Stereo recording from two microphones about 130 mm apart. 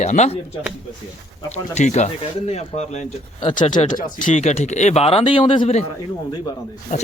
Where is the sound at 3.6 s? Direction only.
35° left (ahead or behind).